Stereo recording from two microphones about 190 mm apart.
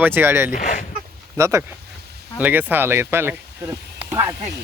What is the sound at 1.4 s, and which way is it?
A man's voice, 15° right (ahead or behind).